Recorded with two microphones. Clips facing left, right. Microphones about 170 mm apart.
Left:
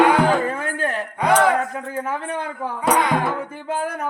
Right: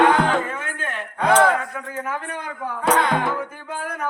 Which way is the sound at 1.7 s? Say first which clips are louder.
Left 3 dB; 30° left (ahead or behind).